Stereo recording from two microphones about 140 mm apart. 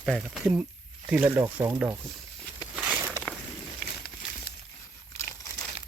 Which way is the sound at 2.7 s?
10° right (ahead or behind).